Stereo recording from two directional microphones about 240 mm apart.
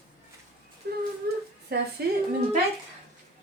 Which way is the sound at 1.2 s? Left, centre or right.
Right.